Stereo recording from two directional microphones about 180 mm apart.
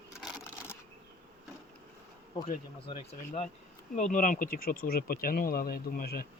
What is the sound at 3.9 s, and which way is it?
Speech, 45° left (ahead or behind).